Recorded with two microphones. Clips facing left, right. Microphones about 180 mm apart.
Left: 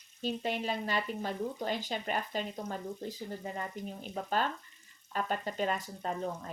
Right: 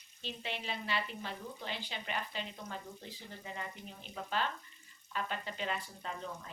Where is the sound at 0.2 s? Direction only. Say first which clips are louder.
Left 9 dB; 45° left (ahead or behind).